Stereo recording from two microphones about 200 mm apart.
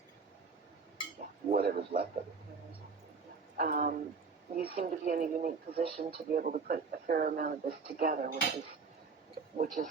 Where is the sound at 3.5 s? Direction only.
40° right (ahead or behind).